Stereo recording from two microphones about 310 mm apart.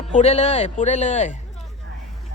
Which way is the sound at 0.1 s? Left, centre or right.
Left.